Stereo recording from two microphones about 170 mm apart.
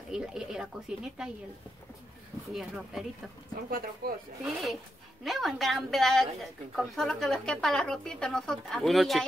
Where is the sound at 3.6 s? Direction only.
60° right (ahead or behind).